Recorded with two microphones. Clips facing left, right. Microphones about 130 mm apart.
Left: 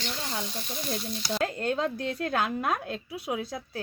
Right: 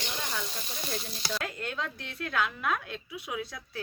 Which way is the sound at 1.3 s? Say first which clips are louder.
Left 7 dB; 35° left (ahead or behind).